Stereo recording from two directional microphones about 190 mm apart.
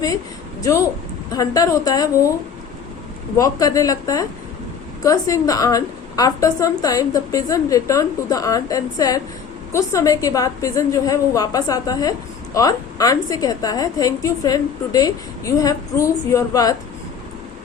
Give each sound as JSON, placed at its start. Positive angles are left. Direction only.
{"t": 0.6, "sound": "a woman's voice", "side_deg": 15}
{"t": 3.3, "sound": "a woman's voice", "side_deg": 20}